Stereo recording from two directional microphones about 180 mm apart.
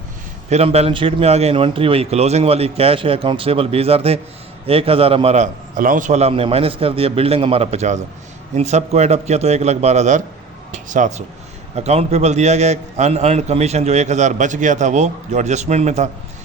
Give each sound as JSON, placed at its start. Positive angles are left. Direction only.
{"t": 0.5, "sound": "a man's voice", "side_deg": -35}